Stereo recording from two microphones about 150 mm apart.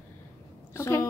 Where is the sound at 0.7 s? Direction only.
20° left (ahead or behind).